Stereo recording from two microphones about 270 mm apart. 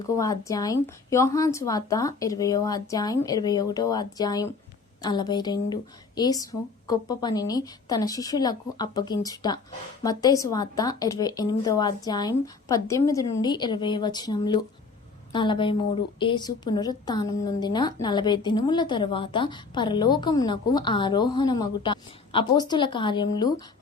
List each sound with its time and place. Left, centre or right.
0.2 s a woman's voice: centre